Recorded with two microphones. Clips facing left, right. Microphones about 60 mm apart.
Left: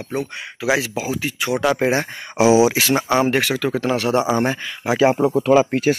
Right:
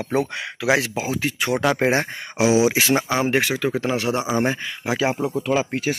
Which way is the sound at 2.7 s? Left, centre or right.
Centre.